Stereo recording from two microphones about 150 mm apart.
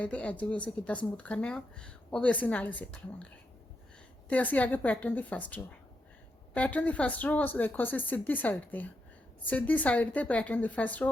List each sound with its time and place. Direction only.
0.0 s speech: 10° left (ahead or behind)
4.3 s speech: 10° left (ahead or behind)